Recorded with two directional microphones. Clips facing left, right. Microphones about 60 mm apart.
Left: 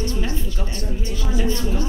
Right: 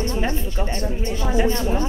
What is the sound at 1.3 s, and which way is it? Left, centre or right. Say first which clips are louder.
Speech: right 3 dB; right.